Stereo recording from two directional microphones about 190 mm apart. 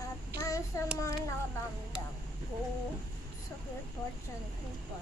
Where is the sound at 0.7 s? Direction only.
15° left (ahead or behind).